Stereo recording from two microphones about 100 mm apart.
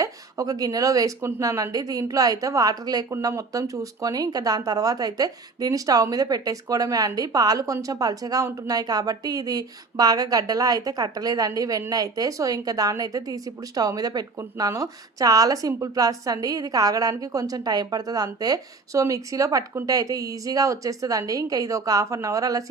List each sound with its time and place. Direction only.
0.0 s speech: 35° right (ahead or behind)